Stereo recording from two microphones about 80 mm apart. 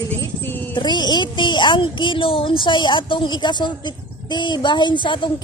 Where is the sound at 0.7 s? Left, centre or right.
Left.